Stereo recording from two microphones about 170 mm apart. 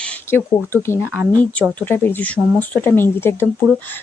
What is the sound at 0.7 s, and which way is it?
Speech, 15° left (ahead or behind).